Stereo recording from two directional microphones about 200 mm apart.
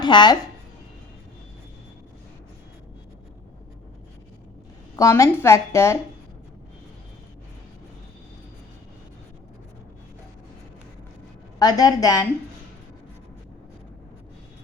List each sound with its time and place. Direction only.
0.0 s speech: 20° left (ahead or behind)
4.9 s a woman's voice: 15° left (ahead or behind)
11.6 s a woman's voice: 20° left (ahead or behind)